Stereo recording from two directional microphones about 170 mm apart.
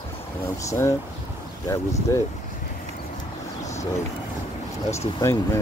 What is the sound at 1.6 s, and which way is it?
Speech, 20° left (ahead or behind).